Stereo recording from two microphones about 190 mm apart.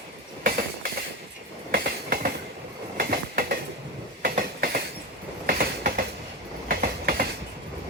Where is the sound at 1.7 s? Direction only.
50° right (ahead or behind).